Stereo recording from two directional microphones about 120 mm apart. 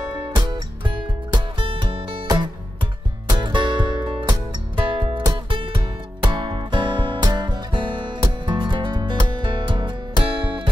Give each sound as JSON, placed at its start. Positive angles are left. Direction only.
{"t": 0.1, "sound": "music", "side_deg": -40}